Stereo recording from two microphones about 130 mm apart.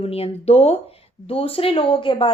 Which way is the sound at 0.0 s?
50° left (ahead or behind).